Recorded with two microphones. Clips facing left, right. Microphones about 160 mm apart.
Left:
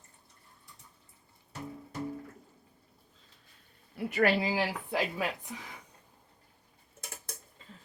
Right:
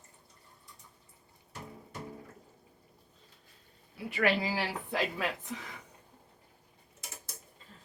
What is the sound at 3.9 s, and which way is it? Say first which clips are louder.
Speech: left 4 dB; 45° left (ahead or behind).